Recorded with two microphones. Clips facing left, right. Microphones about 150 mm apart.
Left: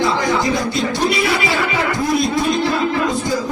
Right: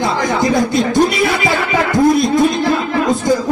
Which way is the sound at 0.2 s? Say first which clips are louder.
Right 3 dB; 45° right (ahead or behind).